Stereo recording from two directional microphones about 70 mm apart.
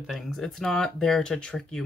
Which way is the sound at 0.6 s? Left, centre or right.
Centre.